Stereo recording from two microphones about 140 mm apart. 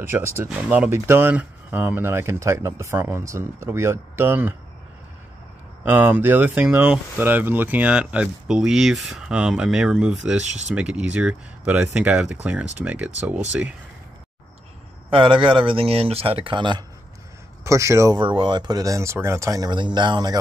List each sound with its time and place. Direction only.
0.4 s speech: 10° right (ahead or behind)
5.9 s speech: 10° right (ahead or behind)
15.0 s speech: 40° right (ahead or behind)
17.6 s speech: 20° right (ahead or behind)
18.2 s speech: 35° right (ahead or behind)